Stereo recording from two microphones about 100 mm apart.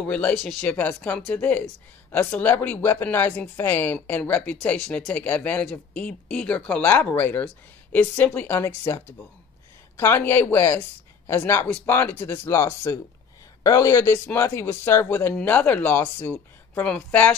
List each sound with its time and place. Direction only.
0.0 s speech: 15° left (ahead or behind)